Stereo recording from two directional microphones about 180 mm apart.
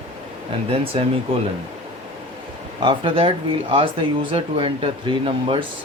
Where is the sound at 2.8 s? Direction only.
30° right (ahead or behind).